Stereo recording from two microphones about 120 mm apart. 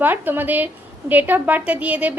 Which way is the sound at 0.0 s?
15° right (ahead or behind).